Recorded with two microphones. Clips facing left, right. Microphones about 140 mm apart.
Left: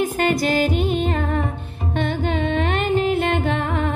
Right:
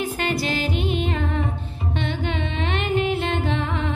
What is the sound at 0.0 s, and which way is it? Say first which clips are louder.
Music: left 5 dB; 45° left (ahead or behind).